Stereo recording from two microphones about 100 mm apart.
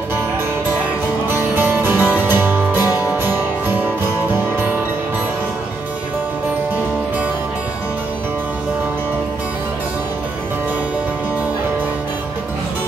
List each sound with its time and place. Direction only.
1.5 s music: 20° right (ahead or behind)